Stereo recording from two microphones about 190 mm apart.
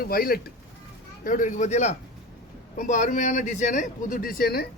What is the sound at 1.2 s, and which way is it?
A man's voice, 40° left (ahead or behind).